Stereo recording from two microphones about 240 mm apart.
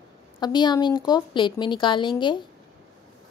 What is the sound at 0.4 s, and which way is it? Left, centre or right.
Speech, centre.